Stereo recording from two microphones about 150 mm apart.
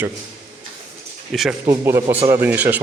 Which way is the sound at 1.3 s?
Centre (ahead or behind).